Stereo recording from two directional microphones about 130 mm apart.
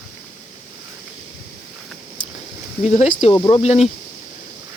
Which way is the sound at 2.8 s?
65° left (ahead or behind).